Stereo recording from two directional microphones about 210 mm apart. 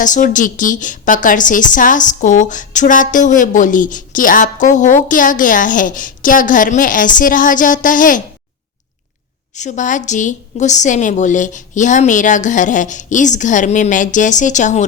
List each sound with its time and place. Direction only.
0.0 s a woman's voice: 40° left (ahead or behind)
9.6 s a woman's voice: 35° left (ahead or behind)